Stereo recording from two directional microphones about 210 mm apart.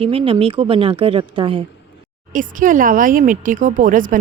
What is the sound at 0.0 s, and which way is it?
A woman's voice, 25° right (ahead or behind).